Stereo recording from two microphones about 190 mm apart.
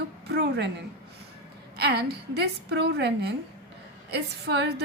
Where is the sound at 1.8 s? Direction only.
60° right (ahead or behind).